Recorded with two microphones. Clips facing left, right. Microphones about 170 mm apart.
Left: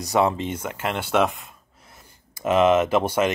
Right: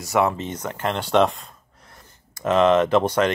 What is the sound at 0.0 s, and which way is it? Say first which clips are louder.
Speech: even; 20° left (ahead or behind).